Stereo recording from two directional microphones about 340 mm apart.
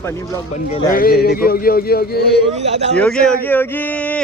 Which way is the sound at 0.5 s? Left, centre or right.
Centre.